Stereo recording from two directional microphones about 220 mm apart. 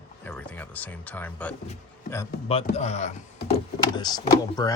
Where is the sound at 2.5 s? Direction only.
30° left (ahead or behind).